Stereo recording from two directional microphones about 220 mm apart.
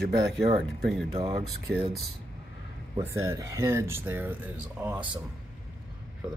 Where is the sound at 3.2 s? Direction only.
15° right (ahead or behind).